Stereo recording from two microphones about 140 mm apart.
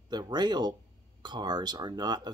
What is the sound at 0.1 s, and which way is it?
Speech, 30° right (ahead or behind).